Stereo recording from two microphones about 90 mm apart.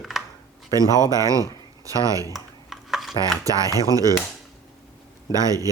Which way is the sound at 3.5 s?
40° right (ahead or behind).